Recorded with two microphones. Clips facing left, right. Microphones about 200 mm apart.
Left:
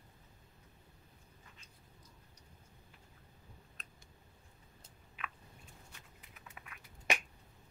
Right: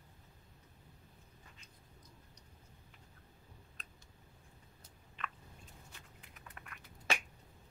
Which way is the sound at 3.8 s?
Centre (ahead or behind).